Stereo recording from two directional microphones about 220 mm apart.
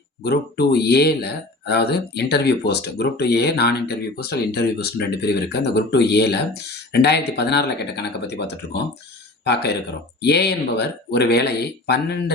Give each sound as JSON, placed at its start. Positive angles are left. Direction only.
{"t": 0.2, "sound": "speech", "side_deg": 45}